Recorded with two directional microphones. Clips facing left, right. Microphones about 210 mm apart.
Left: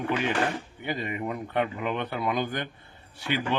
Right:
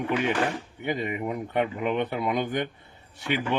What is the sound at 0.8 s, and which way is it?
Speech, 20° right (ahead or behind).